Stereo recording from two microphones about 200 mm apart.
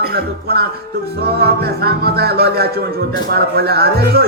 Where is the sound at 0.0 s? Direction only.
50° right (ahead or behind).